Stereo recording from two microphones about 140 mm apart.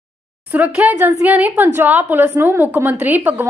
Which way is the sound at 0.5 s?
10° right (ahead or behind).